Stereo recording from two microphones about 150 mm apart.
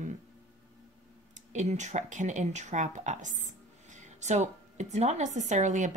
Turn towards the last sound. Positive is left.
turn(degrees=-55)  # may be behind; listen again after turning